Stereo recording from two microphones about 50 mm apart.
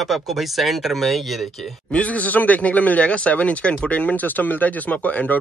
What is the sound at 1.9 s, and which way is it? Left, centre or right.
Speech, left.